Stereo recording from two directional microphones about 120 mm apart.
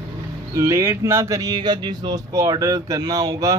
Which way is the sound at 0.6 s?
25° right (ahead or behind).